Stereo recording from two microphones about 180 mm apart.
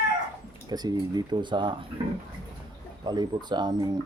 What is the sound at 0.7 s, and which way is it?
Speech, 20° right (ahead or behind).